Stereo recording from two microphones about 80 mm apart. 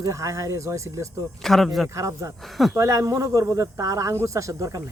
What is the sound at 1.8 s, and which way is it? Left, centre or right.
Speech, right.